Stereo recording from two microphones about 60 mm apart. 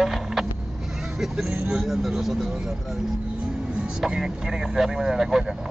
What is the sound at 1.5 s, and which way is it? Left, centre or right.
Speech, centre.